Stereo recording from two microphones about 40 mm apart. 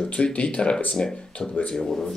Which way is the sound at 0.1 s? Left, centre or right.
Left.